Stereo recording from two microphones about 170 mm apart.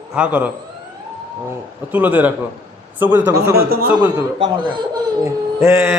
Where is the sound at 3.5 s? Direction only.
65° right (ahead or behind).